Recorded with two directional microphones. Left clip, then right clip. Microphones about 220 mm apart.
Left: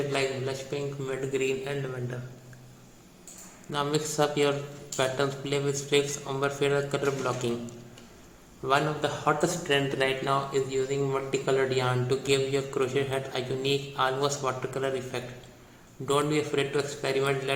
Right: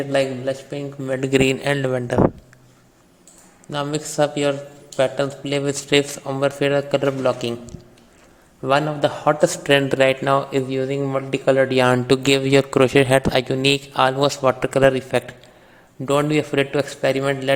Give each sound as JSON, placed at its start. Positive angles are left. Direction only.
{"t": 0.1, "sound": "a man's voice", "side_deg": -40}
{"t": 3.7, "sound": "a man's voice", "side_deg": -30}
{"t": 8.6, "sound": "a man's voice", "side_deg": -40}